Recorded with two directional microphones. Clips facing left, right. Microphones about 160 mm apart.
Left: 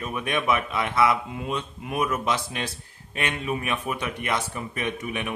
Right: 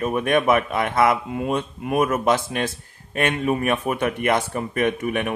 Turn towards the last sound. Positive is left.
turn(degrees=-50)  # may be behind; listen again after turning